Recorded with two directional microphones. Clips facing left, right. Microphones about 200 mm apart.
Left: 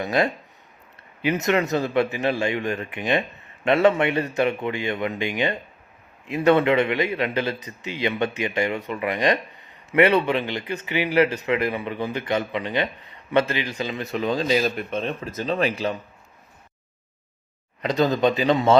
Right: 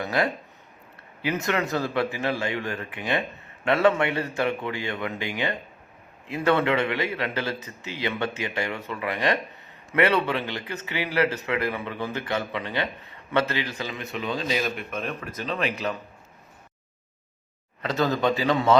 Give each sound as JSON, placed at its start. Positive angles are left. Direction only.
{"t": 0.0, "sound": "a man's voice", "side_deg": 20}
{"t": 14.0, "sound": "speech", "side_deg": 40}
{"t": 17.8, "sound": "a man's voice", "side_deg": 20}